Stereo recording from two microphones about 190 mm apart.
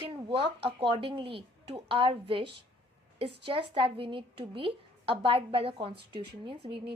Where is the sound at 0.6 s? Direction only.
30° right (ahead or behind).